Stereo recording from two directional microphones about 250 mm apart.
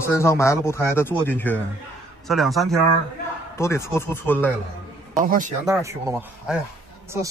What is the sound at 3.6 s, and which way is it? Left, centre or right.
Speech, centre.